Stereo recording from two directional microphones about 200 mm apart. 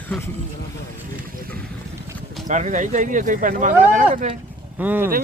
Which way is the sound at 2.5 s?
40° right (ahead or behind).